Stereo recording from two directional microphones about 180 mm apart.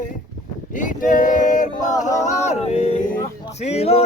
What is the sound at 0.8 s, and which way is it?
Vehicle, 45° left (ahead or behind).